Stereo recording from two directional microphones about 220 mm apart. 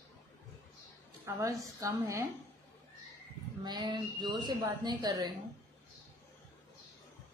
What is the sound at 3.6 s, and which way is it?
A woman's voice, 20° right (ahead or behind).